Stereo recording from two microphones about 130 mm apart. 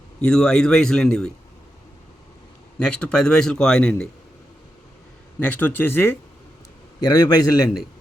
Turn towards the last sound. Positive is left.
turn(degrees=30)  # may be behind; listen again after turning